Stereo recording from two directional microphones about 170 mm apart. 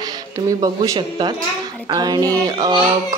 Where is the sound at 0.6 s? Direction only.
25° right (ahead or behind).